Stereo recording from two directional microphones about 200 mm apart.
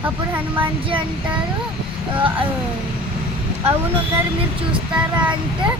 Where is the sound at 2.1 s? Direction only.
25° right (ahead or behind).